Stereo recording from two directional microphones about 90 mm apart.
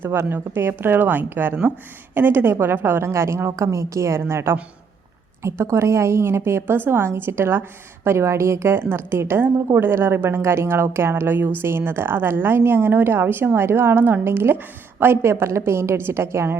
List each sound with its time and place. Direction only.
0.0 s a woman's voice: 25° right (ahead or behind)